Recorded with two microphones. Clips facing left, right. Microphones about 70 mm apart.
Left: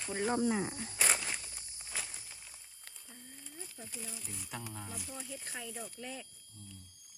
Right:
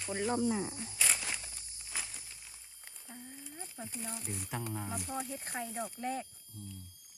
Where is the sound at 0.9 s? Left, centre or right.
Left.